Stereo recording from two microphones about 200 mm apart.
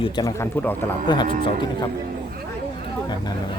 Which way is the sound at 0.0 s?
20° left (ahead or behind).